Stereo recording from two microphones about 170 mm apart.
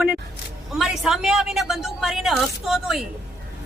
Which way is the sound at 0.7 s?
Centre (ahead or behind).